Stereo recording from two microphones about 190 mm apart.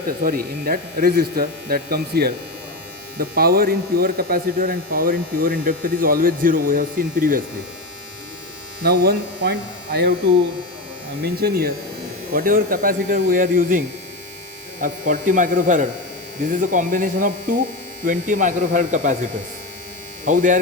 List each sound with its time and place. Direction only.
0.2 s speech: 50° right (ahead or behind)
8.8 s speech: 55° right (ahead or behind)
11.2 s speech: 55° right (ahead or behind)
20.2 s speech: 40° right (ahead or behind)